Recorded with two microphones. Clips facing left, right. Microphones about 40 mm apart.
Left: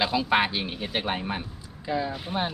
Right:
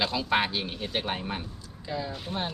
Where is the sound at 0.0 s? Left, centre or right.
Centre.